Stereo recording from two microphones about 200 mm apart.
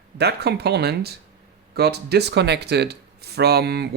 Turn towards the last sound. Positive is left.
turn(degrees=-55)  # may be behind; listen again after turning